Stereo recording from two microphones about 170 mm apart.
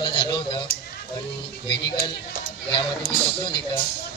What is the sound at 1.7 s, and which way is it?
Speech, 80° left.